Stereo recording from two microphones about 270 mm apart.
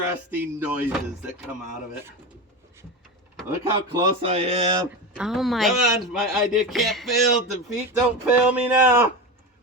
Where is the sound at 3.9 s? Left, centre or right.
Right.